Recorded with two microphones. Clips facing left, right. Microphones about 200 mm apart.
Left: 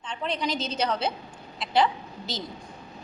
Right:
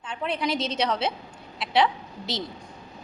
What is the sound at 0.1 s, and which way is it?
A woman's voice, 5° right (ahead or behind).